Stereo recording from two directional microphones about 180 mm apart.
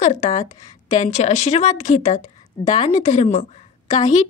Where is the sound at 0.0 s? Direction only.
40° left (ahead or behind).